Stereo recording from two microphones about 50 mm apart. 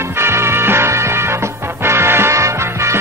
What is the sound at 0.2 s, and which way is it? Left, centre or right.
Music, right.